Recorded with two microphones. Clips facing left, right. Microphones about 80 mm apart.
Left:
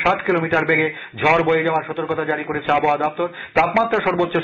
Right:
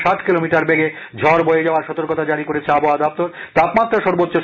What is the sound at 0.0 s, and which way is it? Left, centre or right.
A man's voice, centre.